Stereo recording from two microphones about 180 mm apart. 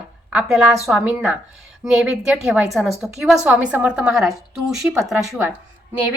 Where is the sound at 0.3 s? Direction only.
5° right (ahead or behind).